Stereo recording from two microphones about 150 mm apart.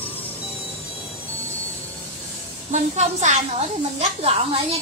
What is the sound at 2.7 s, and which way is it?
A woman's voice, 50° right (ahead or behind).